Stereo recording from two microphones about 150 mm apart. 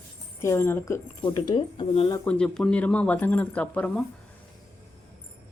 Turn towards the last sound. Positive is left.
turn(degrees=5)  # may be behind; listen again after turning